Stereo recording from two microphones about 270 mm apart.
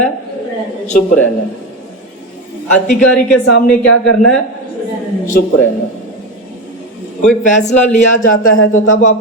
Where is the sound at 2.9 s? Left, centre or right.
Centre.